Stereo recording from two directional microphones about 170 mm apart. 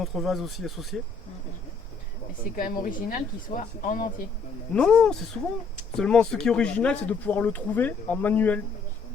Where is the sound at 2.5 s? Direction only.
55° left (ahead or behind).